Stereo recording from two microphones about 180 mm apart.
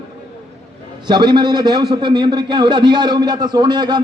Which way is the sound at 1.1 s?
25° right (ahead or behind).